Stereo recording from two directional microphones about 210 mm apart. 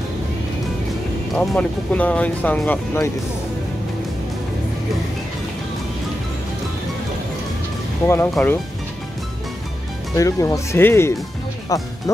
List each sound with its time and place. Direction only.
1.3 s speech: centre (ahead or behind)
8.1 s speech: 10° left (ahead or behind)
10.1 s speech: 15° left (ahead or behind)